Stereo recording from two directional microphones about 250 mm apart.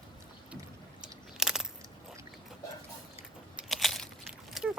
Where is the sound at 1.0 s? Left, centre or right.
Centre.